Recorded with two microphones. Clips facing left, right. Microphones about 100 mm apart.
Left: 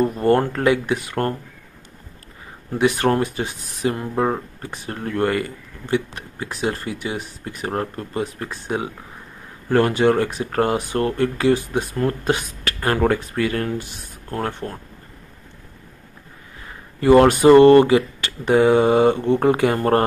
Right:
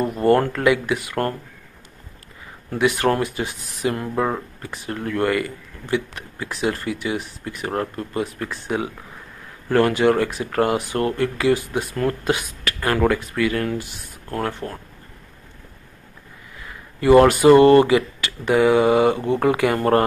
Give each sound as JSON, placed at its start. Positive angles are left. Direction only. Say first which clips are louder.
{"t": 0.3, "sound": "speech", "louder": "right 1 dB", "side_deg": 30}
{"t": 2.7, "sound": "speech", "louder": "left 1 dB", "side_deg": 30}
{"t": 17.2, "sound": "speech", "louder": "left 2 dB", "side_deg": 30}
{"t": 19.1, "sound": "speech", "louder": "left 3 dB", "side_deg": -15}
{"t": 19.4, "sound": "speech", "louder": "even", "side_deg": 30}